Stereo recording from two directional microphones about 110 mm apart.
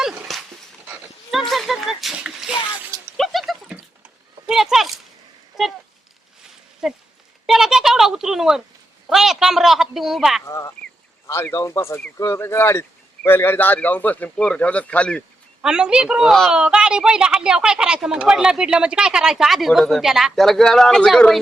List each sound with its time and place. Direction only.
0.0 s dog: centre (ahead or behind)
1.3 s a sound: centre (ahead or behind)
6.8 s a sound: 5° right (ahead or behind)
9.0 s a man's voice: 5° right (ahead or behind)
10.4 s a man's voice: 25° left (ahead or behind); by 15.2 s 10° left (ahead or behind)
15.6 s speech: 10° right (ahead or behind)